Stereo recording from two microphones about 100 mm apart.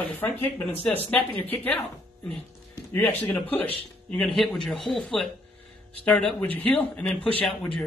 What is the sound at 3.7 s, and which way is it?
A man's voice, 5° left (ahead or behind).